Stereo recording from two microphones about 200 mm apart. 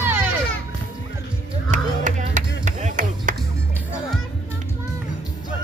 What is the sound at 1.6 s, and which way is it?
Chop, 40° right (ahead or behind).